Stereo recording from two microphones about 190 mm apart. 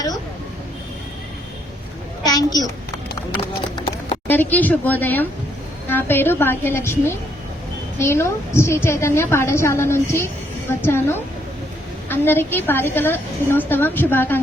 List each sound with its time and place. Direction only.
2.2 s a child's voice: 20° left (ahead or behind)
3.8 s a sound: 30° left (ahead or behind)
4.3 s a woman's voice: 10° left (ahead or behind)